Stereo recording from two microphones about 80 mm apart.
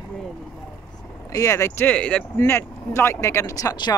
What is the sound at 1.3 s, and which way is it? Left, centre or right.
Speech, left.